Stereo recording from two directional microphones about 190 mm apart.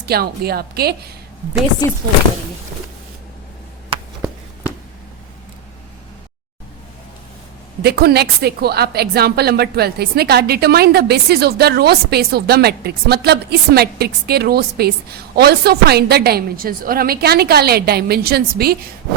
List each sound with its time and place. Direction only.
0.0 s a woman's voice: 55° right (ahead or behind)
7.8 s a woman's voice: 55° right (ahead or behind)